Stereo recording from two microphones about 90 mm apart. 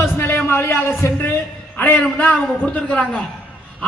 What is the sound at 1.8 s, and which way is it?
A man's voice, 15° left (ahead or behind).